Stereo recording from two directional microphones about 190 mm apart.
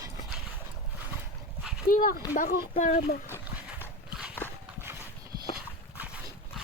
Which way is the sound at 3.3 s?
10° right (ahead or behind).